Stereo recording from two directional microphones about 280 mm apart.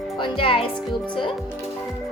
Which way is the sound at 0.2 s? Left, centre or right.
Centre.